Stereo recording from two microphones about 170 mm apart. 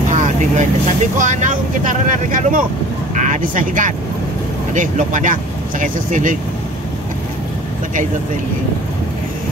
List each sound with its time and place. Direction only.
0.1 s vehicle: 45° right (ahead or behind)
1.1 s speech: 50° right (ahead or behind)